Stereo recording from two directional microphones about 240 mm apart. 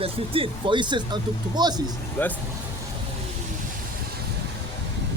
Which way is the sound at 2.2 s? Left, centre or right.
Centre.